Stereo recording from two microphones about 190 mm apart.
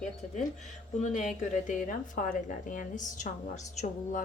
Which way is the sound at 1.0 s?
40° left (ahead or behind).